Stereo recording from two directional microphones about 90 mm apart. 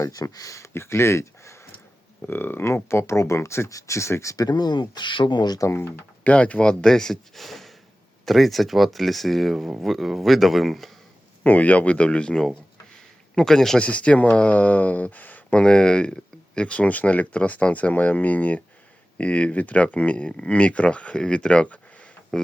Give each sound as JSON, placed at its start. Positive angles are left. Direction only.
{"t": 0.1, "sound": "speech", "side_deg": 40}
{"t": 5.5, "sound": "speech", "side_deg": 35}
{"t": 5.8, "sound": "speech", "side_deg": 15}
{"t": 11.4, "sound": "speech", "side_deg": 15}